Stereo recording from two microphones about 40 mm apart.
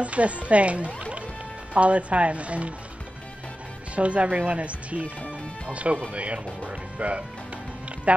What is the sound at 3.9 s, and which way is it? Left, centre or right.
Speech, right.